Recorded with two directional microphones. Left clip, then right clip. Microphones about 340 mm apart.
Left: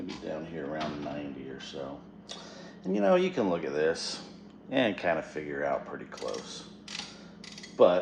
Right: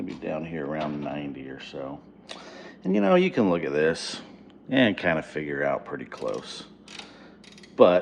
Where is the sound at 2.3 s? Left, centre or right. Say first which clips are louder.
Right 4 dB; right.